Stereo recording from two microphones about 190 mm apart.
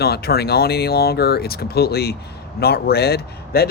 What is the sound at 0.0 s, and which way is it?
A man's voice, 55° left (ahead or behind).